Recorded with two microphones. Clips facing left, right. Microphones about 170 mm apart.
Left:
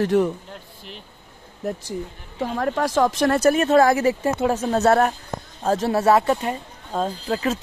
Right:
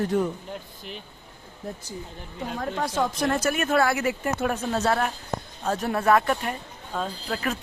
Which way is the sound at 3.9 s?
40° left (ahead or behind).